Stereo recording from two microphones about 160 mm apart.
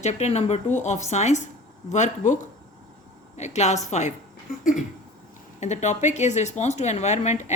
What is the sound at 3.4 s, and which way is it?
Speech, 45° left (ahead or behind).